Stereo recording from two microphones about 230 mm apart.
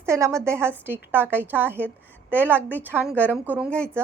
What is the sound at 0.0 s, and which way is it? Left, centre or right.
A woman's voice, centre.